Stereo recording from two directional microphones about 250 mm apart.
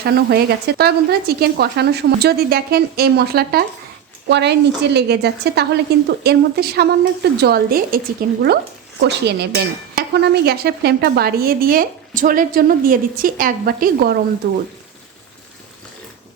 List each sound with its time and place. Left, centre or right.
0.0 s a woman's voice: right